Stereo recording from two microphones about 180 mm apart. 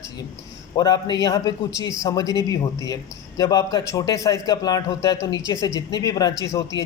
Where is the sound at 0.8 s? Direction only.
20° left (ahead or behind).